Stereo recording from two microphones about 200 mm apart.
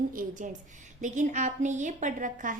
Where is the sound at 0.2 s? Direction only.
40° right (ahead or behind).